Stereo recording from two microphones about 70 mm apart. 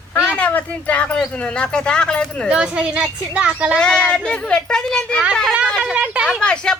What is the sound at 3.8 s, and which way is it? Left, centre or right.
Speech, centre.